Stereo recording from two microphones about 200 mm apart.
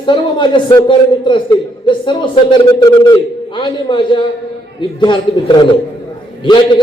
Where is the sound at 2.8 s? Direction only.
20° left (ahead or behind).